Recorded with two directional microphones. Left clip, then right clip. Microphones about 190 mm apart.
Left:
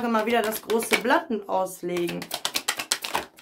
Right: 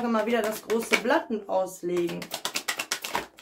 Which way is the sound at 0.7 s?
20° left (ahead or behind).